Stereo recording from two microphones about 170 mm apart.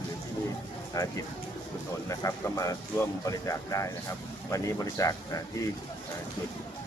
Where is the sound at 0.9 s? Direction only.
20° left (ahead or behind).